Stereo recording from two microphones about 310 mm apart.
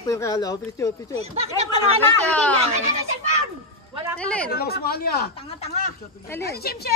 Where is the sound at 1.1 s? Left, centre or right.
Centre.